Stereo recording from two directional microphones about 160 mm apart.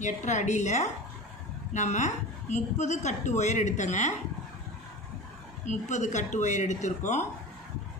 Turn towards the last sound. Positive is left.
turn(degrees=50)  # may be behind; listen again after turning